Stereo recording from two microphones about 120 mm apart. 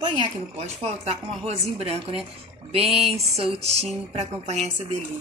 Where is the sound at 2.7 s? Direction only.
55° right (ahead or behind).